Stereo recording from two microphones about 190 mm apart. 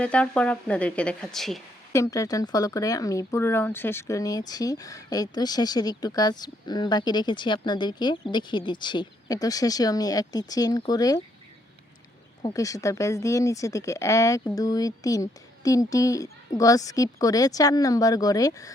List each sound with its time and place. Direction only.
0.0 s speech: 5° left (ahead or behind)
1.9 s speech: 15° left (ahead or behind)
12.4 s speech: 20° left (ahead or behind)